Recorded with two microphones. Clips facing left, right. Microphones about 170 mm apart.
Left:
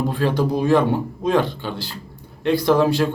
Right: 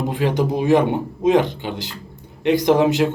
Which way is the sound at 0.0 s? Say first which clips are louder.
Even; 15° right (ahead or behind).